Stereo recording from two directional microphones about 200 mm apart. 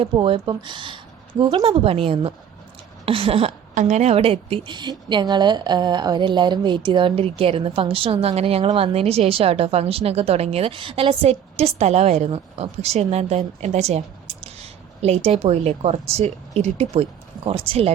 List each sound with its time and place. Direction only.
0.0 s a woman's voice: 25° right (ahead or behind)